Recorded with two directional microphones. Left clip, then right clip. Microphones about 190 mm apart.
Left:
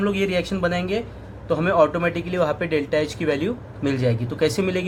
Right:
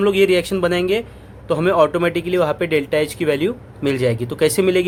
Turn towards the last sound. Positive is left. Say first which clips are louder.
# right 6 dB
turn(degrees=-45)  # may be behind; listen again after turning